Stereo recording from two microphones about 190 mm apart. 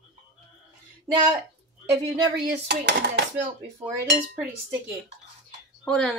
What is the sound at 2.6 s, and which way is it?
Dishes, 60° right (ahead or behind).